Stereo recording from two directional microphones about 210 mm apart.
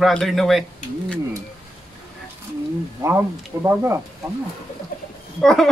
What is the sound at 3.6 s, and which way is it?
Speech, 10° right (ahead or behind).